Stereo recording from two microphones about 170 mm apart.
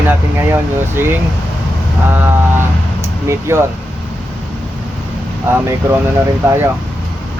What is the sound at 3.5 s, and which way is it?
Speech, 15° right (ahead or behind).